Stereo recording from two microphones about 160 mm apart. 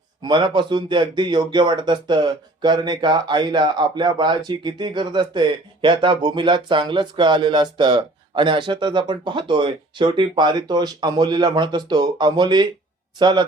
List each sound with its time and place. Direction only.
0.2 s speech: 30° right (ahead or behind)